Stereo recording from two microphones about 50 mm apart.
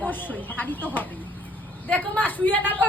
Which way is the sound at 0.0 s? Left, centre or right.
Left.